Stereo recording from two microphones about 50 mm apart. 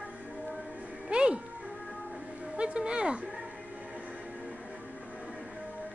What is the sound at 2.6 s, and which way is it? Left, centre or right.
Music, centre.